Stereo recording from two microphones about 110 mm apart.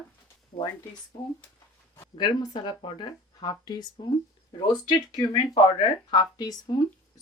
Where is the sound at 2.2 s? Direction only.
40° left (ahead or behind).